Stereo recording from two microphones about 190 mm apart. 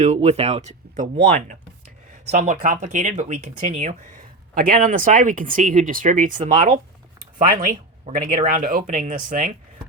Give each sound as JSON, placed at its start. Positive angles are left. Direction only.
{"t": 0.0, "sound": "speech", "side_deg": -35}
{"t": 8.2, "sound": "speech", "side_deg": -45}